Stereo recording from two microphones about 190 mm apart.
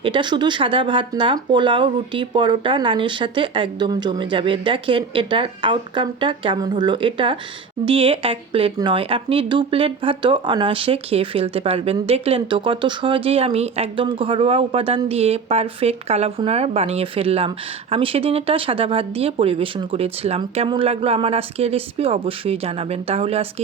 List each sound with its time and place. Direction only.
0.0 s speech: 25° right (ahead or behind)